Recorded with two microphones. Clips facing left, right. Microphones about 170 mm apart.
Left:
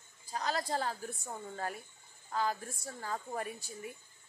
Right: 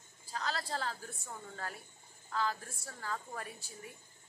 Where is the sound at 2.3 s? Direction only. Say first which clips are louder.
Left 2 dB; 15° left (ahead or behind).